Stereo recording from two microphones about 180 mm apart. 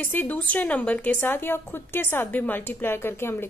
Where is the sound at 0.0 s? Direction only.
10° left (ahead or behind).